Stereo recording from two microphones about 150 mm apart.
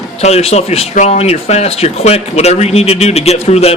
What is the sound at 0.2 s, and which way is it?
Speech, 45° left (ahead or behind).